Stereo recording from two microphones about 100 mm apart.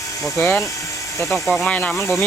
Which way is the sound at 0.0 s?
35° left (ahead or behind).